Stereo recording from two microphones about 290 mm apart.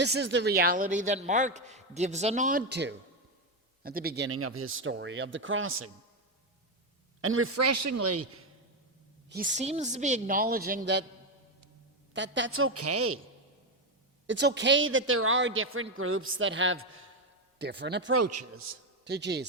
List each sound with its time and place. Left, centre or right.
0.0 s a man's voice: right
7.2 s a man's voice: right
9.3 s a man's voice: right
12.1 s a man's voice: right
14.3 s a man's voice: right
18.1 s a man's voice: right
19.0 s speech: right